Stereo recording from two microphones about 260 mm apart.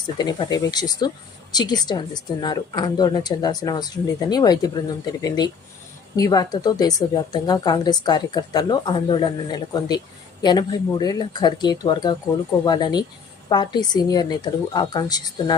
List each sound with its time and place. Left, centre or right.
0.2 s a woman's voice: centre
6.1 s a woman's voice: centre